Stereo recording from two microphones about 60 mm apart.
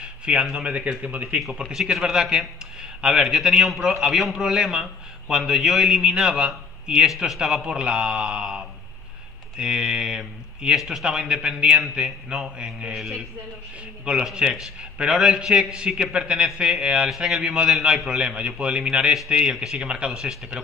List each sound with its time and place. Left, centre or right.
0.0 s a sound: centre
0.7 s speech: right
1.4 s a man's voice: centre
7.6 s a man's voice: centre
14.3 s a man's voice: centre
17.1 s a man's voice: centre